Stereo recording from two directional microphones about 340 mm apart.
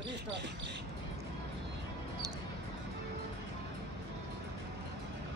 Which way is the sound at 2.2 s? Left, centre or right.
Centre.